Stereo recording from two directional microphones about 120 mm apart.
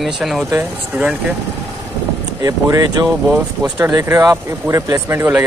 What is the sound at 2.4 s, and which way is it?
Speech, 30° right (ahead or behind).